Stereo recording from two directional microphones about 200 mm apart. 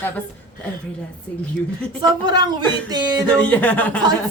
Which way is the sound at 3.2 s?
5° left (ahead or behind).